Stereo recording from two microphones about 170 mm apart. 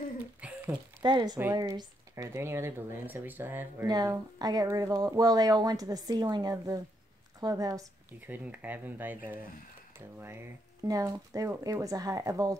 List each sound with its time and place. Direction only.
0.4 s a sound: 5° right (ahead or behind)
1.0 s speech: 25° right (ahead or behind)
8.3 s speech: 10° right (ahead or behind)